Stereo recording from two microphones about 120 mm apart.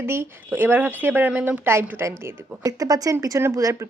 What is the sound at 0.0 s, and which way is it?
Speech, 20° right (ahead or behind).